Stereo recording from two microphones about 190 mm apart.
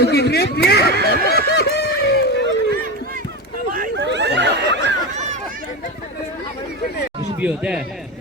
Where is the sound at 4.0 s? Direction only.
65° right (ahead or behind).